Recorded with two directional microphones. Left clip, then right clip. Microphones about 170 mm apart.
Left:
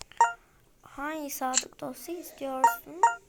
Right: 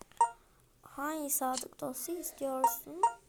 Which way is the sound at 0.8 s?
5° right (ahead or behind).